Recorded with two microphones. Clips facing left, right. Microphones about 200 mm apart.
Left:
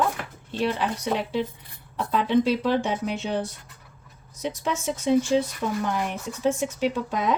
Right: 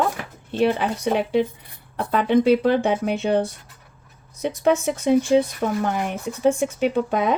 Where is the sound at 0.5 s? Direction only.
55° right (ahead or behind).